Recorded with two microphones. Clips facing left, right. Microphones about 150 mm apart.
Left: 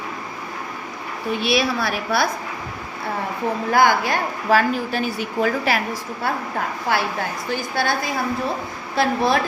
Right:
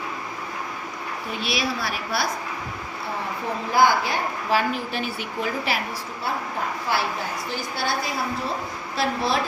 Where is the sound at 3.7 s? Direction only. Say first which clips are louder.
Left 2 dB; 50° left (ahead or behind).